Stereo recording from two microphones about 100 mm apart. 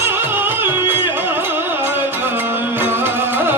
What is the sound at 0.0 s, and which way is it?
Music, 20° right (ahead or behind).